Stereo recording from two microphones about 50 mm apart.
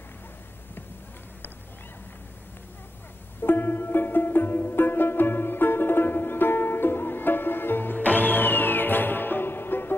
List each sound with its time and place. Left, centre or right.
3.3 s music: left